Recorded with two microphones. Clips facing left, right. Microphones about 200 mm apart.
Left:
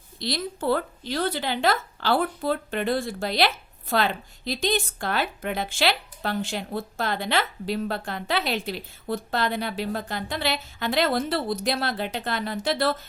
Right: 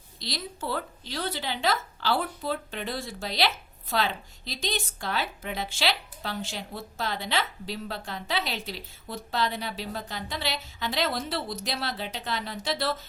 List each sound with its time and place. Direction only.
0.2 s a woman's voice: 55° left (ahead or behind)